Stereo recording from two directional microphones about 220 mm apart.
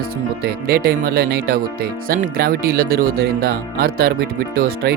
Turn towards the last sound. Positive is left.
turn(degrees=-40)  # may be behind; listen again after turning